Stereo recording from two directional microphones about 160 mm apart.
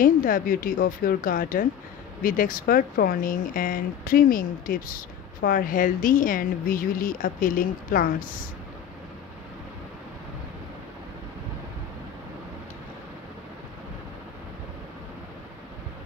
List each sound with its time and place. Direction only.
0.0 s speech: 60° left (ahead or behind)